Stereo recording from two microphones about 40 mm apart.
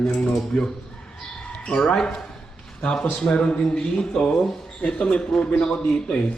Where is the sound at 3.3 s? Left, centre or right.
Left.